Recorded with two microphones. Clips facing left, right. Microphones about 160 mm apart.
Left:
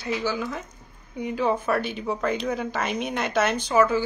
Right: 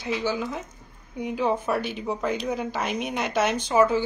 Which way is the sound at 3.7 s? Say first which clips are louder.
Right 1 dB; 25° right (ahead or behind).